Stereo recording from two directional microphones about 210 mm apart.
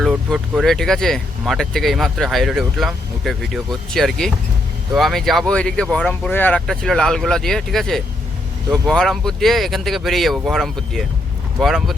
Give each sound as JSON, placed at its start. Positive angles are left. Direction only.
{"t": 0.0, "sound": "speech", "side_deg": 0}